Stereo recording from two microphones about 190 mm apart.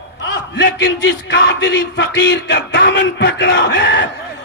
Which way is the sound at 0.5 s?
65° left (ahead or behind).